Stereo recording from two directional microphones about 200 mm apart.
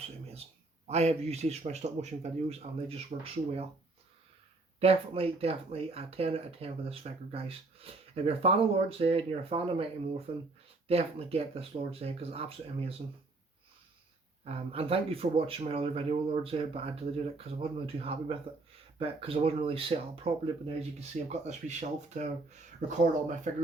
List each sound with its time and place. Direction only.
0.9 s a man's voice: 30° right (ahead or behind)
4.8 s speech: 30° right (ahead or behind)
14.4 s a man's voice: 30° right (ahead or behind)